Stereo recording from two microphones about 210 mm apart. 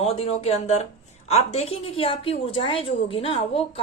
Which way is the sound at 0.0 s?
30° left (ahead or behind).